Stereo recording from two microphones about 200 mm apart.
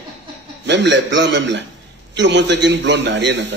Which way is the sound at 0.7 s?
60° right (ahead or behind).